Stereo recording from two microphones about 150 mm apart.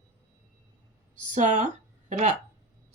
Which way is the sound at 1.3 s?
55° right (ahead or behind).